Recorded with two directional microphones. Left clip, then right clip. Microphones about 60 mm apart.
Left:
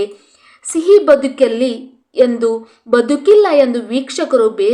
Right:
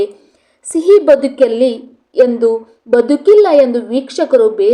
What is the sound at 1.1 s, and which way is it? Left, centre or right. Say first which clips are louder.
A woman's voice: right 1 dB; centre.